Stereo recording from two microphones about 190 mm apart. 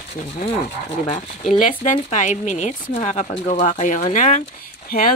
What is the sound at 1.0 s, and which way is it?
Speech, 35° left (ahead or behind).